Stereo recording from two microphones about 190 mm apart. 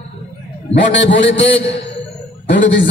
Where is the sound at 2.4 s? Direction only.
70° left (ahead or behind).